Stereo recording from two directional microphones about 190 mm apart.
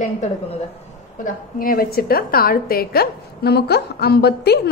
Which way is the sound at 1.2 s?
50° left (ahead or behind).